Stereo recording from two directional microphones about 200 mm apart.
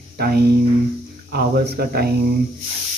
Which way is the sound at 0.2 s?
50° right (ahead or behind).